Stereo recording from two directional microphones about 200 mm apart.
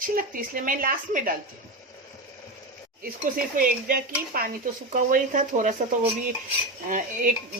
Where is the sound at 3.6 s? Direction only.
45° right (ahead or behind).